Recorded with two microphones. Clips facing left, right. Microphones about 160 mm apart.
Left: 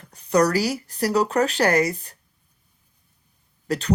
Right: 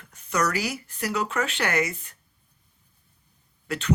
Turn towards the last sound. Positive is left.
turn(degrees=35)  # may be behind; listen again after turning